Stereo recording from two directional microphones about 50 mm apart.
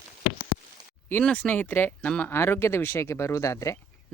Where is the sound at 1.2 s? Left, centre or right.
Left.